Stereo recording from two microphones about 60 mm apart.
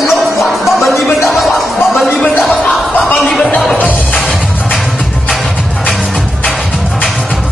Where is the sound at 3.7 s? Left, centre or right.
Left.